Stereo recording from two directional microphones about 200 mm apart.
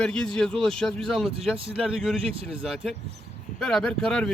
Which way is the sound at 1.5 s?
30° right (ahead or behind).